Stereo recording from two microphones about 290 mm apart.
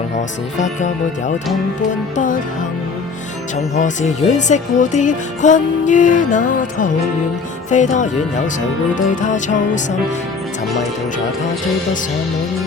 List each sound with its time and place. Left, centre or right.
0.2 s speech: left
1.9 s speech: left
3.8 s speech: left
9.2 s speech: left